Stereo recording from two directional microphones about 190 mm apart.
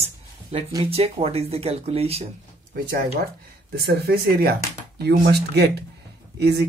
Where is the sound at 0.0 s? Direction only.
30° right (ahead or behind).